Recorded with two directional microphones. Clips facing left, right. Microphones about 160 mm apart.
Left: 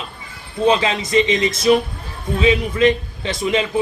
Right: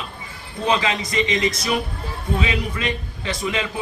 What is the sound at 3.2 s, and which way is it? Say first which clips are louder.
Speech: left 5 dB; 25° left (ahead or behind).